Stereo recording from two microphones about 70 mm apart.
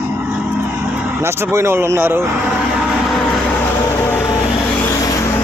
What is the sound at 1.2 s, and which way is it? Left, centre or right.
Speech, right.